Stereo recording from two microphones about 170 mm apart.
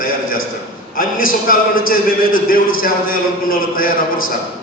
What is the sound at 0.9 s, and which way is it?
A man's voice, 55° left (ahead or behind).